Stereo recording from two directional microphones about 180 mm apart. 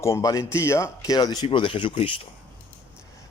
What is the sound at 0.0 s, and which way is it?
A man's voice, 15° left (ahead or behind).